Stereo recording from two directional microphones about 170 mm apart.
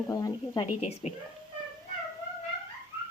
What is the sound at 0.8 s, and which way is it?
Speech, 40° left (ahead or behind).